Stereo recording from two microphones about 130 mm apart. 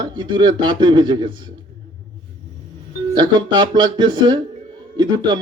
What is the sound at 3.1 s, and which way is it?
Speech, 35° right (ahead or behind).